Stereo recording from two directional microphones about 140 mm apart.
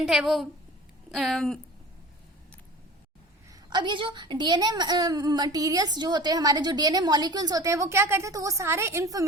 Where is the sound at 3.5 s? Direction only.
30° right (ahead or behind).